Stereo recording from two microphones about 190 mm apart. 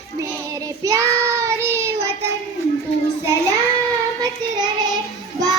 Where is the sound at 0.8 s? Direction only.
15° right (ahead or behind).